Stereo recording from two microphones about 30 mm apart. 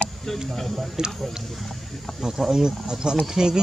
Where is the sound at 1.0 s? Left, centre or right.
Right.